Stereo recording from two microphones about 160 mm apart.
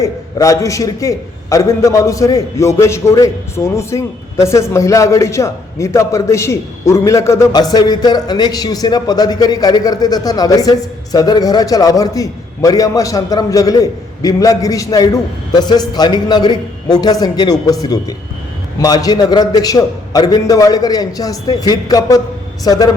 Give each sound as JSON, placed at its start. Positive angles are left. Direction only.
{"t": 0.0, "sound": "a man's voice", "side_deg": 20}